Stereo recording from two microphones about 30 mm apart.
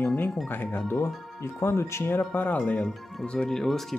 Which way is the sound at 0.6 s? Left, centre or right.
Left.